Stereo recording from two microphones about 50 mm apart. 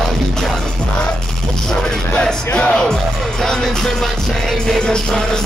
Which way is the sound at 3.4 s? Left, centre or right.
Centre.